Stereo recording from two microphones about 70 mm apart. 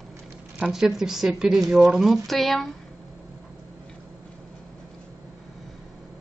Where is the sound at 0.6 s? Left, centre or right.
Centre.